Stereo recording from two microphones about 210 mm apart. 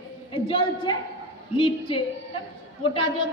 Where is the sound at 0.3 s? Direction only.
25° left (ahead or behind).